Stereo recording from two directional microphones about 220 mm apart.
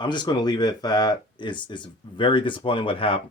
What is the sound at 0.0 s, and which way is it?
Speech, 20° left (ahead or behind).